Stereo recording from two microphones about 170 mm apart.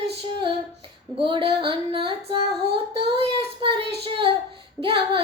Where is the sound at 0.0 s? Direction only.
30° right (ahead or behind).